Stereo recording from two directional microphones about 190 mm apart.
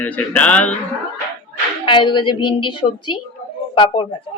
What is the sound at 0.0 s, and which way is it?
Speech, 5° left (ahead or behind).